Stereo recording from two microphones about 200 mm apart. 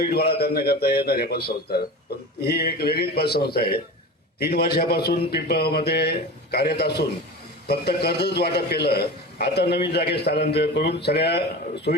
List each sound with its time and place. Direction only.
0.0 s a man's voice: 50° left (ahead or behind)